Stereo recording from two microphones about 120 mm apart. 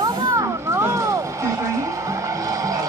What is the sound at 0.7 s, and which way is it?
Music, 25° right (ahead or behind).